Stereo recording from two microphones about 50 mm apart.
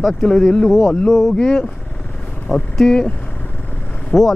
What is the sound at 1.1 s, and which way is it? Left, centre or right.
Speech, centre.